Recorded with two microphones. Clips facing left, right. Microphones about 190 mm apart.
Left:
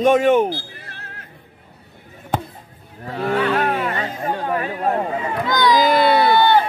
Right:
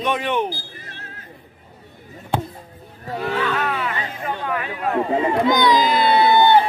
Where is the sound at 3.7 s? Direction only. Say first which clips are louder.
Left 3 dB; 45° left (ahead or behind).